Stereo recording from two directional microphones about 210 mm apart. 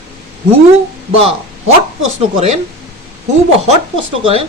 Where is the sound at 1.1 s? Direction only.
30° right (ahead or behind).